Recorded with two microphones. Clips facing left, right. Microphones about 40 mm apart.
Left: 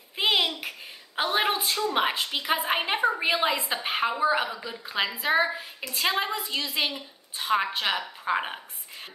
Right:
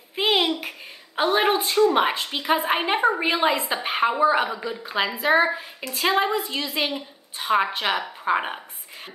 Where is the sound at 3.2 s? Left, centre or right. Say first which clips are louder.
Right 3 dB; centre.